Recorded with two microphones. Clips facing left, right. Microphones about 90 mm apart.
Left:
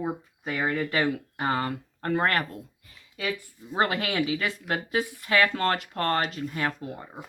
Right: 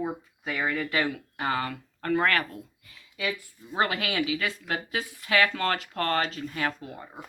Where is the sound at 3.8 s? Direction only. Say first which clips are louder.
Left 1 dB; 40° left (ahead or behind).